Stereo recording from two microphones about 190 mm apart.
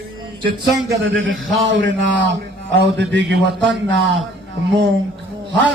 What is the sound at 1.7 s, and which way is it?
A man's voice, 70° right (ahead or behind).